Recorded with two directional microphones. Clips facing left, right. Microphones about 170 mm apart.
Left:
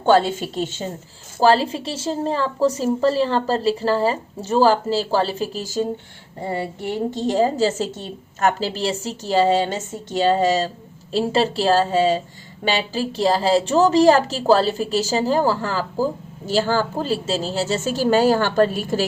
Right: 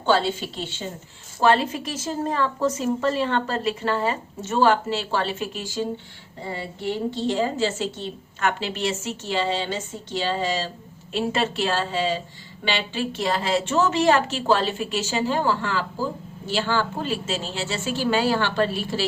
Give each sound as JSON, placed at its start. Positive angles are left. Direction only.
{"t": 0.0, "sound": "a woman's voice", "side_deg": 45}
{"t": 1.4, "sound": "a woman's voice", "side_deg": 35}